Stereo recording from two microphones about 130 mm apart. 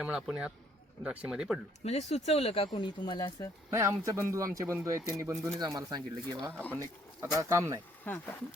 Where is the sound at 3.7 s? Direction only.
25° right (ahead or behind).